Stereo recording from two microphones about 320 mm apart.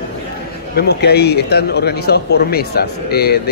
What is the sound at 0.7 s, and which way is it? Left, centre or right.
Speech, left.